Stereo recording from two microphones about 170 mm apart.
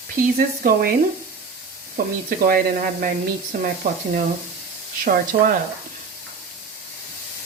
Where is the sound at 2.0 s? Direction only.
60° right (ahead or behind).